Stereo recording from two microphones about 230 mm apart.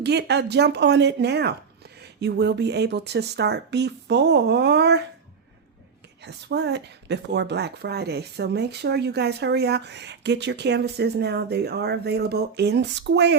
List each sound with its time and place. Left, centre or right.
0.0 s speech: right
6.2 s speech: right